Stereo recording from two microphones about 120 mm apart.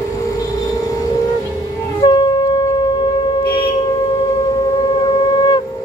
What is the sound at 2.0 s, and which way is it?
Shofar, 35° left (ahead or behind).